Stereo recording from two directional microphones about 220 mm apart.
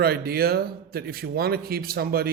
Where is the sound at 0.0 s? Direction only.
45° right (ahead or behind).